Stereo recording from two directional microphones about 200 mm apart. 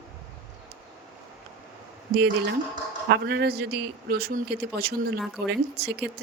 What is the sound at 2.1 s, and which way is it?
A man's voice, 60° right (ahead or behind).